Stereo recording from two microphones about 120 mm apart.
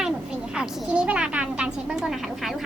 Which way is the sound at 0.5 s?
10° right (ahead or behind).